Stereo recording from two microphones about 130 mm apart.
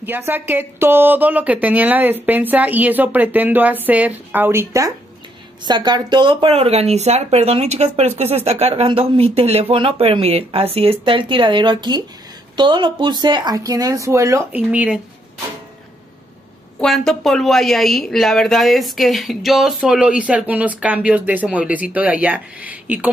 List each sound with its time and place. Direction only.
0.0 s a woman's voice: 15° right (ahead or behind)
5.7 s speech: 35° right (ahead or behind)
14.5 s a woman's voice: 10° right (ahead or behind)
16.8 s speech: 5° left (ahead or behind)